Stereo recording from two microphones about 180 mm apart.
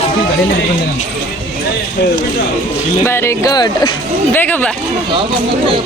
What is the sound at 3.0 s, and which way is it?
Speech, 15° left (ahead or behind).